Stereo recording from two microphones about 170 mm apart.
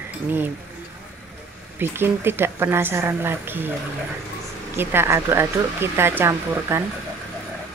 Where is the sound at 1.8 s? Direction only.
15° right (ahead or behind).